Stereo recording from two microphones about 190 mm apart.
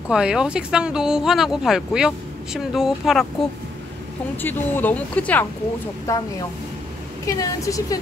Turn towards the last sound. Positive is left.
turn(degrees=15)  # may be behind; listen again after turning